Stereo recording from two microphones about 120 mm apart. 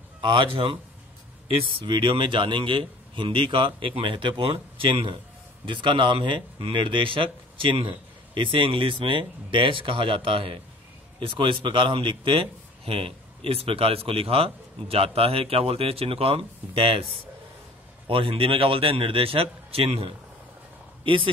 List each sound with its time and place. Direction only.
0.2 s a man's voice: 45° right (ahead or behind)